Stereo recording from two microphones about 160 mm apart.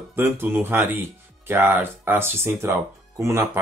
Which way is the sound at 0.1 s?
15° right (ahead or behind).